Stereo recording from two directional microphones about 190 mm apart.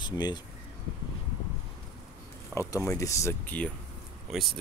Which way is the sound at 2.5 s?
15° left (ahead or behind).